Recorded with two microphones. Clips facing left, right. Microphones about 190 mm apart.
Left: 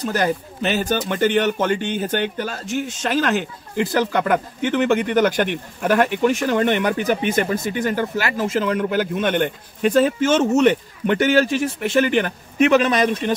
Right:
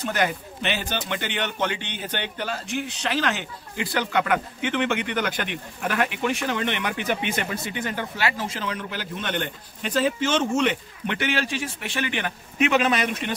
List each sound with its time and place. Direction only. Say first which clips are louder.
0.0 s speech: left 4 dB; 40° left (ahead or behind)